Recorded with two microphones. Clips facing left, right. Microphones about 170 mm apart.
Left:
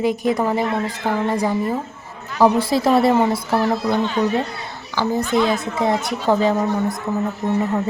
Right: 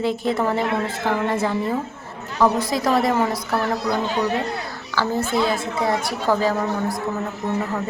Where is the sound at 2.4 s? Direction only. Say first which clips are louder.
Left 4 dB; 30° left (ahead or behind).